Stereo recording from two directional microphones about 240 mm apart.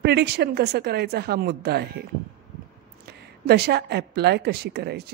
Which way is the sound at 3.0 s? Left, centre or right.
Right.